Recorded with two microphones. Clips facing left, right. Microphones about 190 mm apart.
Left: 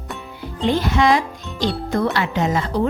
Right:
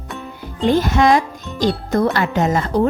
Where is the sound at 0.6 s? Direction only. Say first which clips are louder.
Right 3 dB; 45° right (ahead or behind).